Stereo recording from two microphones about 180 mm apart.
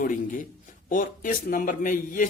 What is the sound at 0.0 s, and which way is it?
A man's voice, 45° left (ahead or behind).